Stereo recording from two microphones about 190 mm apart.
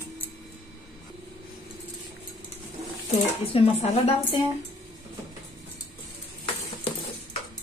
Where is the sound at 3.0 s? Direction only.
35° left (ahead or behind).